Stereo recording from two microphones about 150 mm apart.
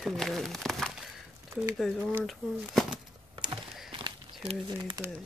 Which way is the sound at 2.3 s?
Centre (ahead or behind).